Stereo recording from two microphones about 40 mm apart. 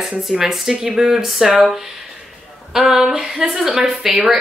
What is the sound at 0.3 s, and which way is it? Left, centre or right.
Speech, centre.